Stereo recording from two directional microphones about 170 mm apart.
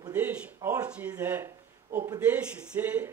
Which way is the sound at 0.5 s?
20° right (ahead or behind).